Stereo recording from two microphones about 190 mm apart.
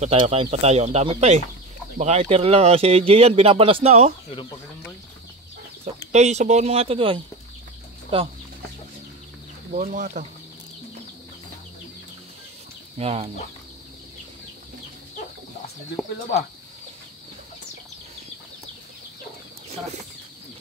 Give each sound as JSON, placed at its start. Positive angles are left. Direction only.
{"t": 0.0, "sound": "speech", "side_deg": -30}
{"t": 4.3, "sound": "speech", "side_deg": 30}
{"t": 6.1, "sound": "speech", "side_deg": -35}
{"t": 9.7, "sound": "speech", "side_deg": -40}
{"t": 12.9, "sound": "speech", "side_deg": -30}
{"t": 19.7, "sound": "speech", "side_deg": -35}